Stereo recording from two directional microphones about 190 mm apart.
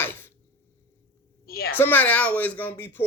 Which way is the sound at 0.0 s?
10° left (ahead or behind).